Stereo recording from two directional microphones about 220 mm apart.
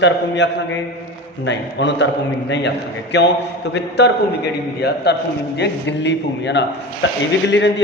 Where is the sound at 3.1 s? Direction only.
50° left (ahead or behind).